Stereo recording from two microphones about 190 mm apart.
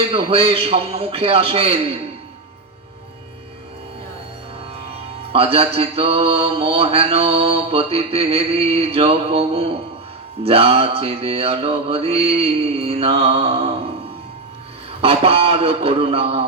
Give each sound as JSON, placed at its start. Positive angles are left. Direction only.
{"t": 0.1, "sound": "mantra", "side_deg": -30}
{"t": 5.3, "sound": "mantra", "side_deg": -30}
{"t": 15.0, "sound": "a sound", "side_deg": -30}